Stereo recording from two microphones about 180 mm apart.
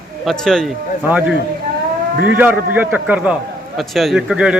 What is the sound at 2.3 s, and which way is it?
A man's voice, 10° right (ahead or behind).